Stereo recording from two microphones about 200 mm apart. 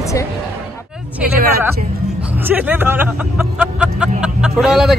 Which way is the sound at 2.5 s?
10° right (ahead or behind).